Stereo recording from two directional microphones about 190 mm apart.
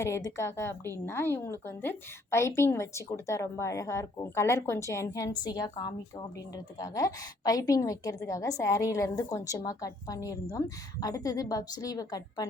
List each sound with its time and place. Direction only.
0.0 s a woman's voice: 15° left (ahead or behind)